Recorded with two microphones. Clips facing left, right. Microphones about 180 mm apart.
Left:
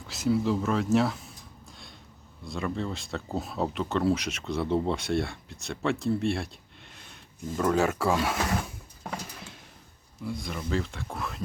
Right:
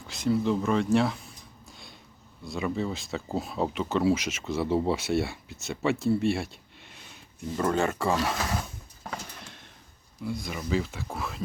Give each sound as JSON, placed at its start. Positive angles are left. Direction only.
{"t": 0.1, "sound": "speech", "side_deg": 0}
{"t": 2.4, "sound": "speech", "side_deg": 0}
{"t": 9.0, "sound": "a sound", "side_deg": 5}
{"t": 10.2, "sound": "speech", "side_deg": 0}